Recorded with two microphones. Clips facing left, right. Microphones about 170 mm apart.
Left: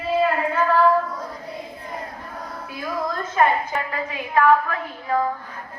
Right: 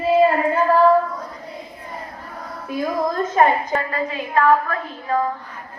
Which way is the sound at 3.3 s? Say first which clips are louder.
Right 2 dB; 40° right (ahead or behind).